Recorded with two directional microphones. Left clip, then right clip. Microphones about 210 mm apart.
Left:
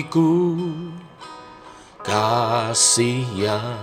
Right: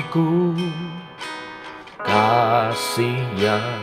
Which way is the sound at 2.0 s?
45° left (ahead or behind).